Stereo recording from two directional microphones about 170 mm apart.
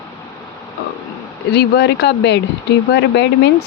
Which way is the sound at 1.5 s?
75° left (ahead or behind).